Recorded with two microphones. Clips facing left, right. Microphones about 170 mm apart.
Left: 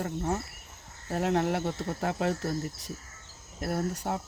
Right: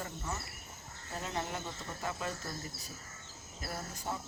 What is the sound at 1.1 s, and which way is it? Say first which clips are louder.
Speech: left 12 dB; 70° left (ahead or behind).